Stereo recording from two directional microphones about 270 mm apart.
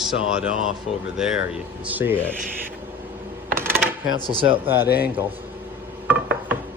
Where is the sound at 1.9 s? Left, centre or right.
Centre.